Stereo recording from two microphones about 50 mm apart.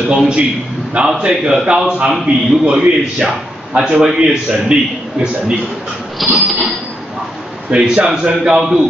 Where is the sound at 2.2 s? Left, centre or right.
Right.